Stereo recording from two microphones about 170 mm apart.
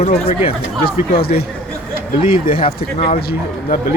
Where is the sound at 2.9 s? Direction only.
35° left (ahead or behind).